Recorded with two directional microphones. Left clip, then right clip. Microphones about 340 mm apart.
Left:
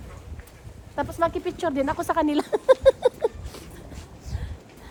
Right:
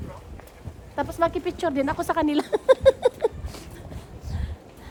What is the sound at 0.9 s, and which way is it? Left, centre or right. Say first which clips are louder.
Speech: right 1 dB; centre.